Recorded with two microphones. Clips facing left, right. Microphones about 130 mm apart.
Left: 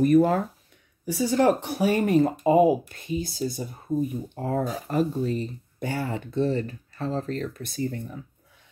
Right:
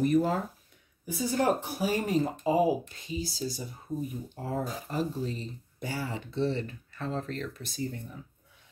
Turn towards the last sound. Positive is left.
turn(degrees=60)  # may be behind; listen again after turning